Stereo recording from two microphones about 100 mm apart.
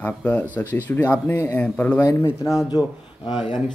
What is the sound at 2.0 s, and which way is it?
Speech, 35° left (ahead or behind).